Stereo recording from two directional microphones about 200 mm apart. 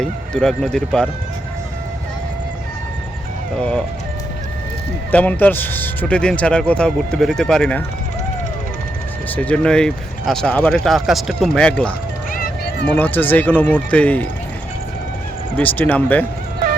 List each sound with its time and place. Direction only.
0.0 s speech: 5° left (ahead or behind)
3.6 s speech: 5° left (ahead or behind)
5.1 s speech: 10° left (ahead or behind)
9.3 s speech: 5° left (ahead or behind)
12.3 s music: 50° left (ahead or behind)
12.9 s speech: 10° left (ahead or behind)
15.5 s speech: 10° left (ahead or behind)